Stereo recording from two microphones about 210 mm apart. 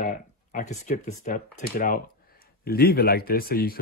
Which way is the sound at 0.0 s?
40° left (ahead or behind).